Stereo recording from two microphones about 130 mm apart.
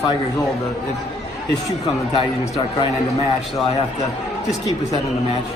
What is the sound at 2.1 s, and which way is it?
Speech, 45° left (ahead or behind).